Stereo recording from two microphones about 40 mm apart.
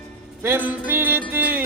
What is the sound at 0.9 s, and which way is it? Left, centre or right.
Music, right.